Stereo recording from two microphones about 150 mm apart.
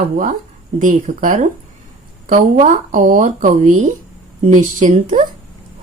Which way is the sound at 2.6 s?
60° right (ahead or behind).